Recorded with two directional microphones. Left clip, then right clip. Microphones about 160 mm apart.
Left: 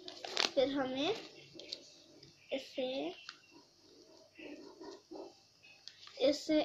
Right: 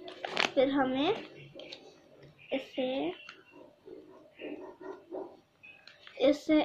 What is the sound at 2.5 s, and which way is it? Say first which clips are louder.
Speech: right 5 dB; 5° left (ahead or behind).